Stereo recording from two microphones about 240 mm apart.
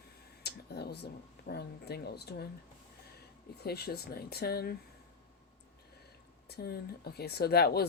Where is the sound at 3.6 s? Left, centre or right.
Left.